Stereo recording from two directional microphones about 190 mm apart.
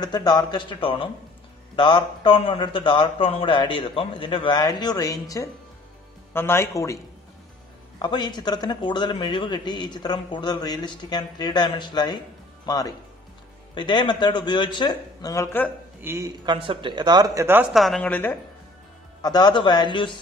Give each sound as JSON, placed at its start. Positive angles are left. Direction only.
{"t": 0.0, "sound": "a man's voice", "side_deg": 20}
{"t": 8.0, "sound": "a man's voice", "side_deg": 20}
{"t": 16.0, "sound": "speech", "side_deg": -15}
{"t": 17.7, "sound": "a woman's voice", "side_deg": 5}
{"t": 19.2, "sound": "a man's voice", "side_deg": 20}